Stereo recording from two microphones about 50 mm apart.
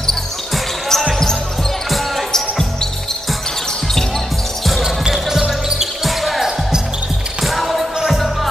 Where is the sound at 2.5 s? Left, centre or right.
Centre.